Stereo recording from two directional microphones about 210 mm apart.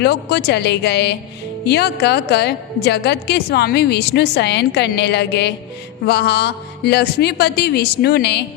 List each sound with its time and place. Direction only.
0.0 s a woman's voice: 50° left (ahead or behind)